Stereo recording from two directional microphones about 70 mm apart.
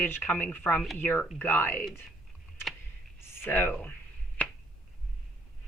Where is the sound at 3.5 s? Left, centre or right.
Left.